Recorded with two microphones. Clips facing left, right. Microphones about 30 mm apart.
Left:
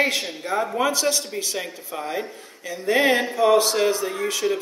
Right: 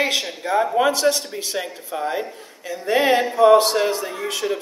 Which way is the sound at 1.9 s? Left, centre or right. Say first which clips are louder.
Right 4 dB; centre.